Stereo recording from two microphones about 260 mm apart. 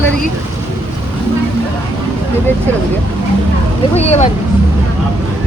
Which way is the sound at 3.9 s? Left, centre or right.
Left.